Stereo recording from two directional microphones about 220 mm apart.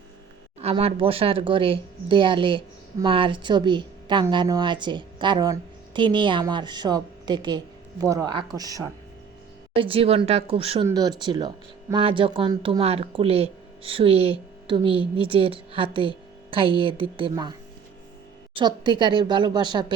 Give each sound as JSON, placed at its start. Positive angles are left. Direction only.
{"t": 0.6, "sound": "speech", "side_deg": -25}
{"t": 9.7, "sound": "speech", "side_deg": -25}
{"t": 18.5, "sound": "speech", "side_deg": -20}